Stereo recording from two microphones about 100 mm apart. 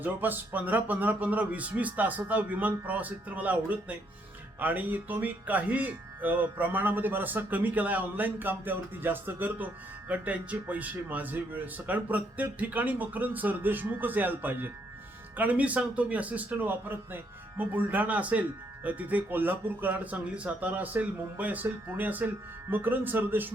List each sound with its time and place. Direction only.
0.0 s speech: 20° right (ahead or behind)